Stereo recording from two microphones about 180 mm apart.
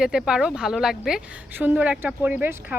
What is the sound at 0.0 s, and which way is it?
A woman's voice, 5° right (ahead or behind).